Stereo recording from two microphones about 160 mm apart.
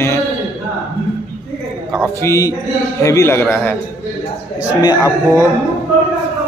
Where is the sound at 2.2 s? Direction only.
20° left (ahead or behind).